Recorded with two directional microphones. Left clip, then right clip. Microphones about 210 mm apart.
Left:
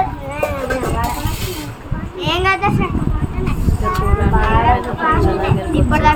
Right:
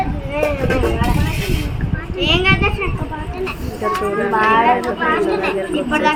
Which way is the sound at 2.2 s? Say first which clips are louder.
Right 1 dB; 5° left (ahead or behind).